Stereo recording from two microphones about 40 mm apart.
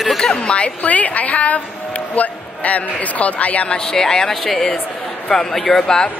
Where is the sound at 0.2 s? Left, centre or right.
Left.